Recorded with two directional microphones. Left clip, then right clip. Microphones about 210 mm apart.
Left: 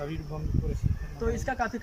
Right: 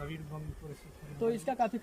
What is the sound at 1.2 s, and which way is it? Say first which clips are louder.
Speech: left 1 dB; 15° right (ahead or behind).